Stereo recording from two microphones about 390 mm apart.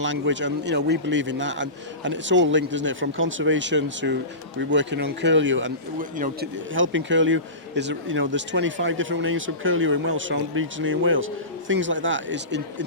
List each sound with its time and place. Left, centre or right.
0.0 s a man's voice: right